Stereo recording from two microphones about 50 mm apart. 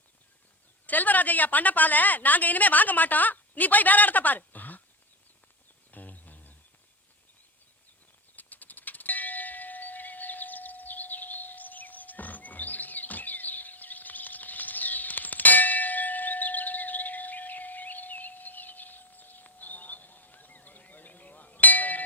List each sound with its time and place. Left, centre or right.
0.9 s a woman's voice: left
5.9 s a sound: left
8.4 s clang: left